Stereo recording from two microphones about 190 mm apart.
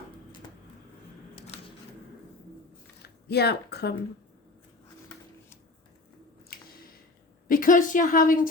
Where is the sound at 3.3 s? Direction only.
60° left (ahead or behind).